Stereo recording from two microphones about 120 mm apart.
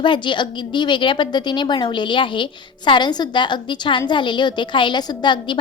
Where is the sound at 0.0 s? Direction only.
40° left (ahead or behind).